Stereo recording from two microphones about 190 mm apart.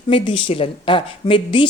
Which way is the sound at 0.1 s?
25° left (ahead or behind).